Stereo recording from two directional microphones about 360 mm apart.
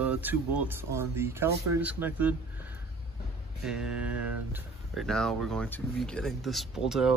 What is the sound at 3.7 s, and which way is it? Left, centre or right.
Speech, centre.